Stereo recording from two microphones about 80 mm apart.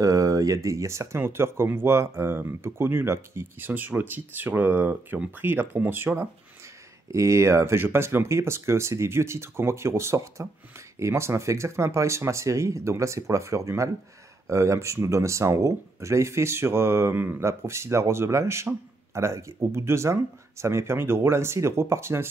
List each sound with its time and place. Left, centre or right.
0.0 s speech: right
7.1 s speech: right